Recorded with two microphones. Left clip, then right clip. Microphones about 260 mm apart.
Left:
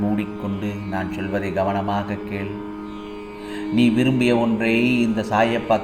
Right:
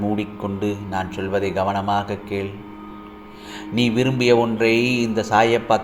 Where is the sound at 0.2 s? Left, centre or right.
Right.